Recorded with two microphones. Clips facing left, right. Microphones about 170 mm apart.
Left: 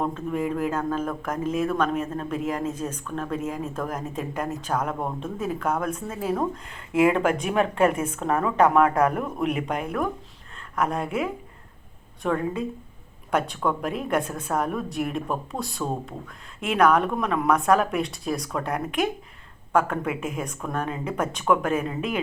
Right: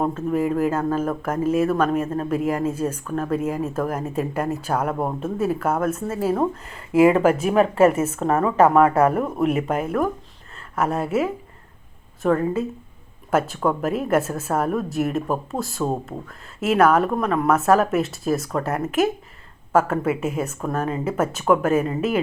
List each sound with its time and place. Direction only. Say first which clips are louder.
0.0 s a woman's voice: right 5 dB; 5° right (ahead or behind)